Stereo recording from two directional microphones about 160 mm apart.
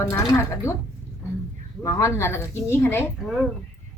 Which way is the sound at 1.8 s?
20° left (ahead or behind).